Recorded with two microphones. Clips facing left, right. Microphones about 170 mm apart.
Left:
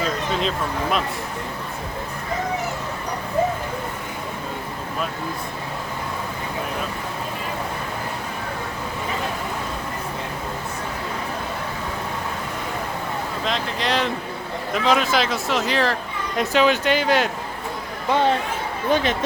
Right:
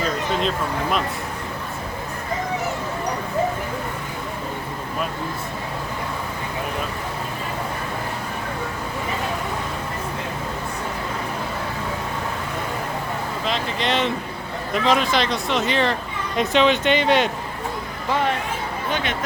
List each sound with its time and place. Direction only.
0.0 s speech: centre (ahead or behind)
13.4 s speech: centre (ahead or behind)
18.1 s speech: 25° left (ahead or behind)